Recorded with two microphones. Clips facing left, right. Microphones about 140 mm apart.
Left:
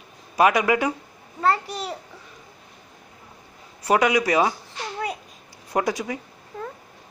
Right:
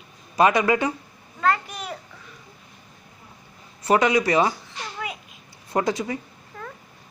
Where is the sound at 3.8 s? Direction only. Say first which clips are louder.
Even; 10° left (ahead or behind).